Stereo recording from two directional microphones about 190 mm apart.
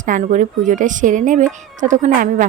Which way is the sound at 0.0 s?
40° right (ahead or behind).